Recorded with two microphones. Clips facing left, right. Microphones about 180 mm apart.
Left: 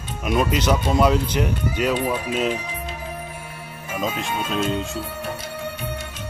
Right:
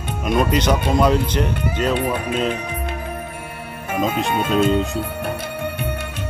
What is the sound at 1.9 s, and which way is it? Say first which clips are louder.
Speech: right 2 dB; 60° right (ahead or behind).